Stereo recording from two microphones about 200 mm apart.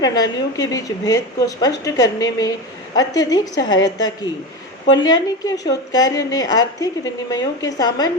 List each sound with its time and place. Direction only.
0.0 s a woman's voice: 20° left (ahead or behind)